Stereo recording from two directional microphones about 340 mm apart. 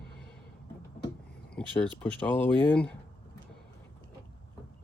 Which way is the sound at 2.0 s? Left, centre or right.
Centre.